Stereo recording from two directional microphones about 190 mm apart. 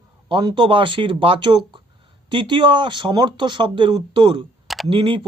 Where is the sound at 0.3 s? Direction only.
25° right (ahead or behind).